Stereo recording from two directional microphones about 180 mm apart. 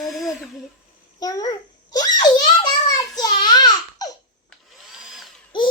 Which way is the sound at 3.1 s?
20° left (ahead or behind).